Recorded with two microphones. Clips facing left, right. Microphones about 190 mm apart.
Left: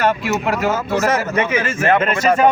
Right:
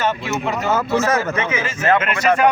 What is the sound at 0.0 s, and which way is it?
Speech, 60° left (ahead or behind).